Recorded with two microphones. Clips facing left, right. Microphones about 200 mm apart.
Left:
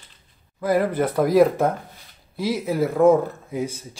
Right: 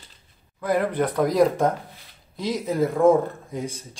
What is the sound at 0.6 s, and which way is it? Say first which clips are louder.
Speech: left 2 dB; 5° left (ahead or behind).